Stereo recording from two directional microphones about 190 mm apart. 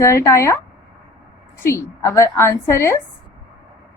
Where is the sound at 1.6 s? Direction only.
15° left (ahead or behind).